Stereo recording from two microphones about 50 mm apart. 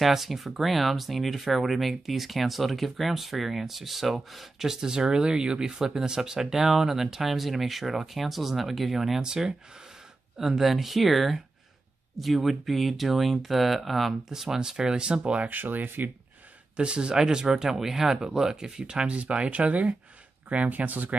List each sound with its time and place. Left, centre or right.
0.0 s speech: centre
15.4 s speech: right
16.7 s speech: right